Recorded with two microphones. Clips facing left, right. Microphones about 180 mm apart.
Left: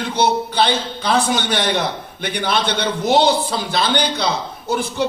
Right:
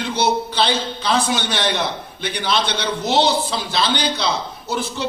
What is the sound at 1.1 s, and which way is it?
A man's voice, 50° left (ahead or behind).